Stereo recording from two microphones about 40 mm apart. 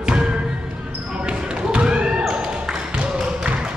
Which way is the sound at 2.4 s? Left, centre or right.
Right.